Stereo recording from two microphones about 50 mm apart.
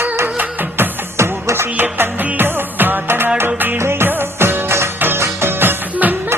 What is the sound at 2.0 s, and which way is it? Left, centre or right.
Music, right.